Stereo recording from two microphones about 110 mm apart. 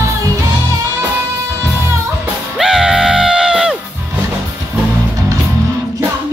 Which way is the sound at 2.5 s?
5° right (ahead or behind).